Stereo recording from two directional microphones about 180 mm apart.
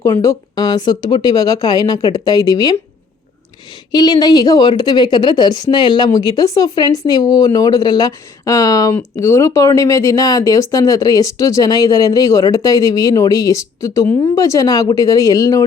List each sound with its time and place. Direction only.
0.0 s a woman's voice: 20° left (ahead or behind)
3.9 s a woman's voice: 20° left (ahead or behind)